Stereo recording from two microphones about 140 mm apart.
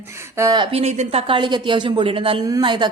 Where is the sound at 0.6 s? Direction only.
45° right (ahead or behind).